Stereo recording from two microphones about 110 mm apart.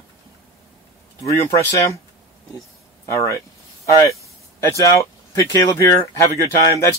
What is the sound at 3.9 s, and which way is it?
Speech, 30° left (ahead or behind).